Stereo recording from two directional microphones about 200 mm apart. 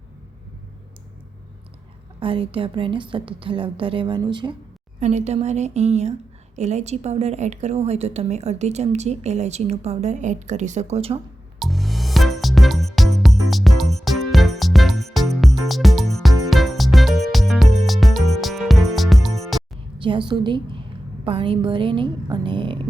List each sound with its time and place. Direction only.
2.2 s a woman's voice: 25° right (ahead or behind)
4.9 s a woman's voice: 35° right (ahead or behind)
11.6 s music: centre (ahead or behind)
20.0 s a woman's voice: 25° right (ahead or behind)